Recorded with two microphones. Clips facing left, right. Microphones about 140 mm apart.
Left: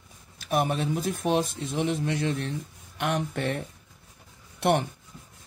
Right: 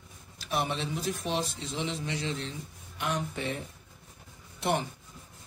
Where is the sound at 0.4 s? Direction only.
50° left (ahead or behind).